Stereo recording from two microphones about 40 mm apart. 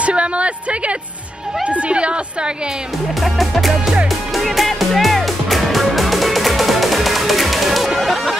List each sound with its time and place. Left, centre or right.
0.0 s a woman's voice: right
3.2 s music: centre